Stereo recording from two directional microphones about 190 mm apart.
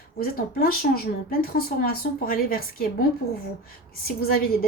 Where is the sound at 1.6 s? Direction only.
50° left (ahead or behind).